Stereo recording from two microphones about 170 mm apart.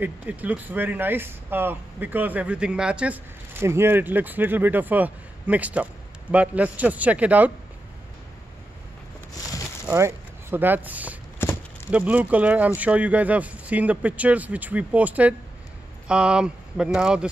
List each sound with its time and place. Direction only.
0.0 s speech: 10° right (ahead or behind)
9.8 s speech: 15° right (ahead or behind)
11.3 s a sound: 15° left (ahead or behind)
11.9 s speech: 10° right (ahead or behind)